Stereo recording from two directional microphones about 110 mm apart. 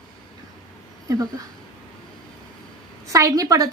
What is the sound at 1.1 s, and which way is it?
Speech, 30° right (ahead or behind).